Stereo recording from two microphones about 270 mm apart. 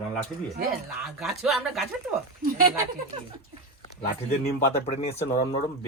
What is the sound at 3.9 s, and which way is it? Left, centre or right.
Speech, left.